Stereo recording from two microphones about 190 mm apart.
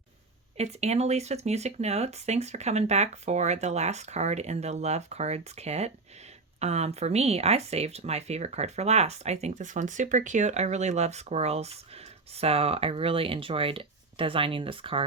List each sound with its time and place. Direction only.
0.5 s speech: 35° right (ahead or behind)